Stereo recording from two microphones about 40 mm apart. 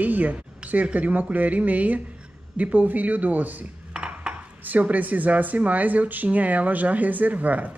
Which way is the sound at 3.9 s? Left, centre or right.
Right.